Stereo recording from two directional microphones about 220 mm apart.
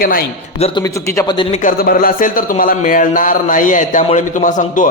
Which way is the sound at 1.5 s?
35° left (ahead or behind).